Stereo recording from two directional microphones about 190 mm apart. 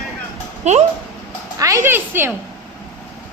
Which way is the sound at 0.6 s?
35° right (ahead or behind).